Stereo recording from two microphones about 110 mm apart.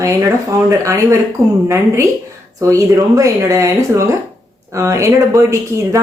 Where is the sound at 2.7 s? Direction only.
30° right (ahead or behind).